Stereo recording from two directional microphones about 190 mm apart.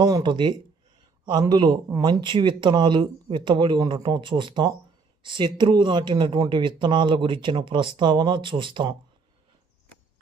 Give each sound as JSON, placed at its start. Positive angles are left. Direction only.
{"t": 0.0, "sound": "speech", "side_deg": -20}